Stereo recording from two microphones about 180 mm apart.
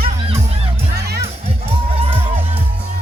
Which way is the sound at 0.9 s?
65° right (ahead or behind).